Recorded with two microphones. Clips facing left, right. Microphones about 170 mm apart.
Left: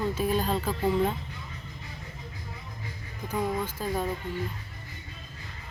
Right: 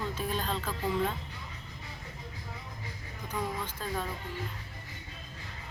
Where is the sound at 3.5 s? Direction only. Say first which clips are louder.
Left 6 dB; 10° left (ahead or behind).